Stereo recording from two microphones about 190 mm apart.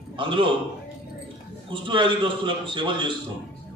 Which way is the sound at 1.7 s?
25° right (ahead or behind).